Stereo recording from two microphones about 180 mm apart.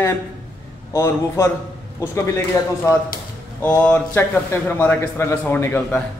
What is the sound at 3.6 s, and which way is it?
A man's voice, 10° left (ahead or behind).